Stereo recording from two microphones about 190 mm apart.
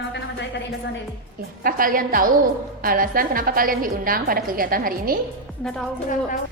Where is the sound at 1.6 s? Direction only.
45° right (ahead or behind).